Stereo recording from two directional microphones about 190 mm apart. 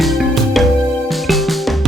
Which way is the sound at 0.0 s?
Centre (ahead or behind).